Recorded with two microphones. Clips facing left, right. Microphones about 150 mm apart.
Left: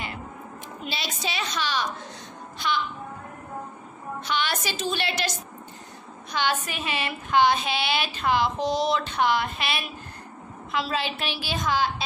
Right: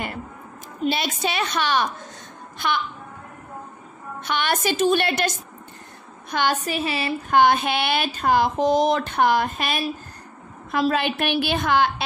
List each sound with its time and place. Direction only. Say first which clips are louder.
0.8 s a woman's voice: right 9 dB; 55° right (ahead or behind)
4.2 s speech: right 5 dB; 55° right (ahead or behind)
6.3 s a woman's voice: right 4 dB; 40° right (ahead or behind)
7.3 s a woman's voice: right 3 dB; 55° right (ahead or behind)